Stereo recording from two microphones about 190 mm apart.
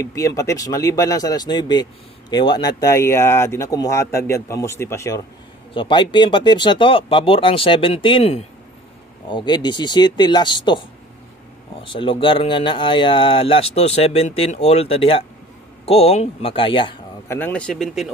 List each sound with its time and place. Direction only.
0.0 s a man's voice: 15° left (ahead or behind)
5.7 s speech: 25° left (ahead or behind)
11.9 s a man's voice: 25° left (ahead or behind)
17.3 s speech: 10° left (ahead or behind)